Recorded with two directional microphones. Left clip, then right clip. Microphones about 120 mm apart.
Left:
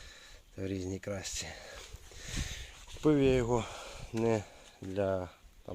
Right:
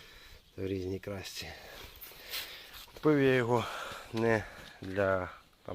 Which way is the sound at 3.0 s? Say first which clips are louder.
Right 1 dB; 35° left (ahead or behind).